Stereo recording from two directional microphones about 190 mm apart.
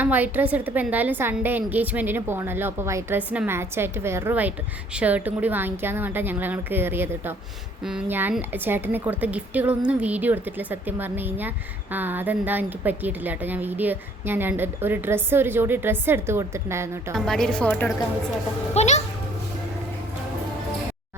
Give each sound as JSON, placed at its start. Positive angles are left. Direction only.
{"t": 0.0, "sound": "a woman's voice", "side_deg": -10}
{"t": 17.2, "sound": "a woman's voice", "side_deg": 0}
{"t": 18.7, "sound": "a child's voice", "side_deg": 35}